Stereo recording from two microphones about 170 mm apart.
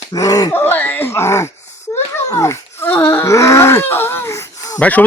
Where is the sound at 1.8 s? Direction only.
15° left (ahead or behind).